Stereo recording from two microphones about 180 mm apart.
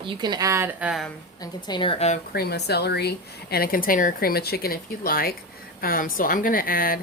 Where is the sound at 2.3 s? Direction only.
60° left (ahead or behind).